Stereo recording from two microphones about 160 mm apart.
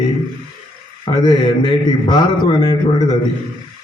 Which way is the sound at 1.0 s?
25° left (ahead or behind).